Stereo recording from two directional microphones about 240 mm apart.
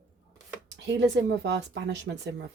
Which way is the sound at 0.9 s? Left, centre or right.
Right.